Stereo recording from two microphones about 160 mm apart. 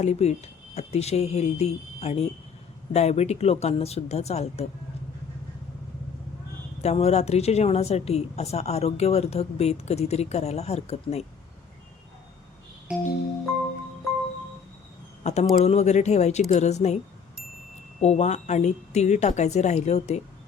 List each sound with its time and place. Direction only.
0.0 s a woman's voice: 40° left (ahead or behind)
6.8 s a woman's voice: 40° left (ahead or behind)
12.9 s music: 5° right (ahead or behind)
15.2 s a woman's voice: 45° left (ahead or behind)
18.0 s a woman's voice: 45° left (ahead or behind)